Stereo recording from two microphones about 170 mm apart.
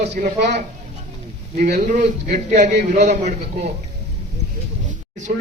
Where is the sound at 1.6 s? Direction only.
55° right (ahead or behind).